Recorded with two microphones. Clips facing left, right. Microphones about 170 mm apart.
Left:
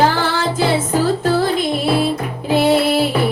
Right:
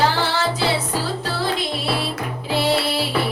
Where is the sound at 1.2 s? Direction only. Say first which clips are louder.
Left 9 dB; 50° left (ahead or behind).